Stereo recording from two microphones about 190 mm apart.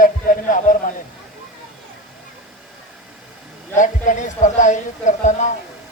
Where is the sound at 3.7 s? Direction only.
40° left (ahead or behind).